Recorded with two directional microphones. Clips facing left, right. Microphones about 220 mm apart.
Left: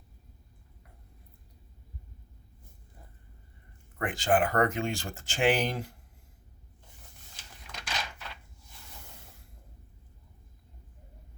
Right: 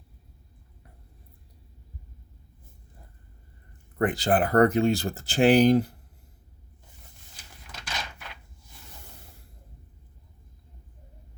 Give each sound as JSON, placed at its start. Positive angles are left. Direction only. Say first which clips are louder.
{"t": 3.9, "sound": "speech", "louder": "right 3 dB", "side_deg": -35}
{"t": 7.6, "sound": "door", "louder": "even", "side_deg": 0}